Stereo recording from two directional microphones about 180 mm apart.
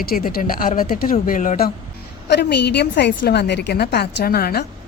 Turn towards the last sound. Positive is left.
turn(degrees=55)  # may be behind; listen again after turning